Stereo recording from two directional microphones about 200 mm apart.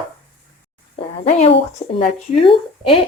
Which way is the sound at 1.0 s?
30° left (ahead or behind).